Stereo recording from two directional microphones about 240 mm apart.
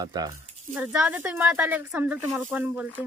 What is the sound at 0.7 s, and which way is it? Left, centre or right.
Speech, centre.